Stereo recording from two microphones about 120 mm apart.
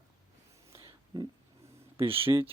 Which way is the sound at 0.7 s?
35° right (ahead or behind).